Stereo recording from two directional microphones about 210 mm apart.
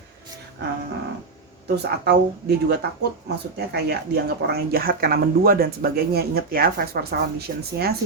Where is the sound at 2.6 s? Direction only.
50° right (ahead or behind).